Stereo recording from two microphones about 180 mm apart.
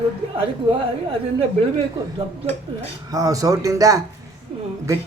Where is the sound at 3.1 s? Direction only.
20° right (ahead or behind).